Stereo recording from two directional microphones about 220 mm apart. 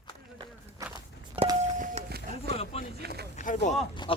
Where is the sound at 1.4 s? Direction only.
25° right (ahead or behind).